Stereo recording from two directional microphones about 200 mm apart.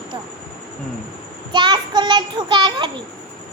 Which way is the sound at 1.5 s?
20° right (ahead or behind).